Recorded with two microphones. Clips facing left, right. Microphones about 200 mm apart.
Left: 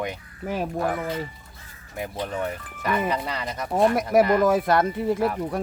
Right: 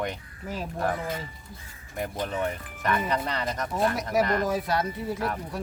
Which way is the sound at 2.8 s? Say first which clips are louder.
Left 2 dB; 5° left (ahead or behind).